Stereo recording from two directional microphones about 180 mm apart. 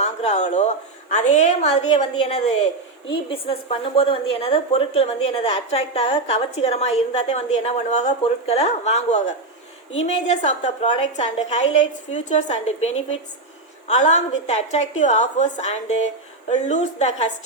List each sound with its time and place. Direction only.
0.0 s a woman's voice: 35° left (ahead or behind)